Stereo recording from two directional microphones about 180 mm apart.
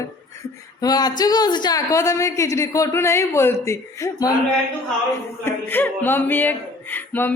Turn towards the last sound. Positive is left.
turn(degrees=10)  # may be behind; listen again after turning